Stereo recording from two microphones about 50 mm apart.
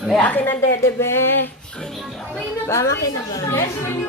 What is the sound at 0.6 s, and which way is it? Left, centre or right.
Speech, left.